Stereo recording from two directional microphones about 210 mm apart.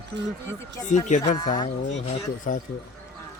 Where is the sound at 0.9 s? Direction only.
35° left (ahead or behind).